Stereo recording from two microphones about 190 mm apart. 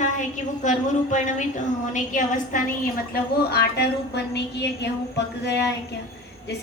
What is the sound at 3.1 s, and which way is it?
A woman's voice, 55° left (ahead or behind).